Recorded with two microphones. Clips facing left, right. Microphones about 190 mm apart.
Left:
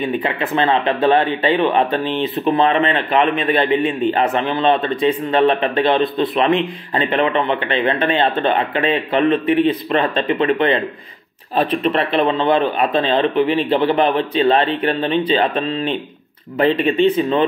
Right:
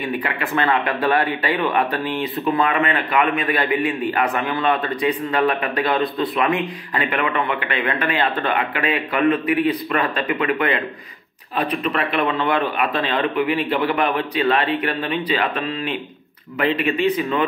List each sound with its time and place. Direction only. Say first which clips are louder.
0.0 s speech: left 4 dB; 20° left (ahead or behind)